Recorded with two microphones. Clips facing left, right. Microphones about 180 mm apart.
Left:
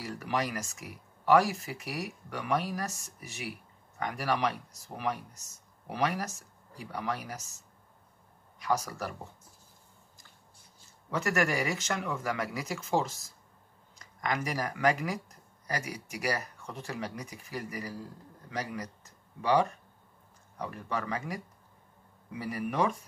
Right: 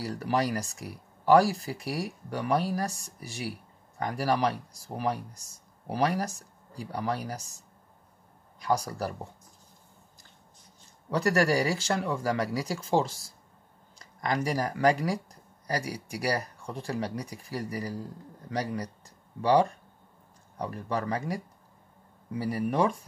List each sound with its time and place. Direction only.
0.0 s speech: 35° right (ahead or behind)
8.5 s speech: 35° right (ahead or behind)
11.1 s speech: 35° right (ahead or behind)